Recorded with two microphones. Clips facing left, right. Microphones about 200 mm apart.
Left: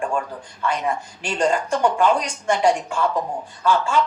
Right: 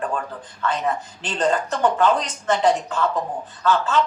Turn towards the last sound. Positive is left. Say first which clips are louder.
# even
turn(degrees=10)  # may be behind; listen again after turning